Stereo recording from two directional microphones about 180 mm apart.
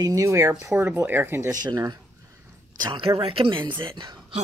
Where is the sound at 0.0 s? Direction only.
15° right (ahead or behind).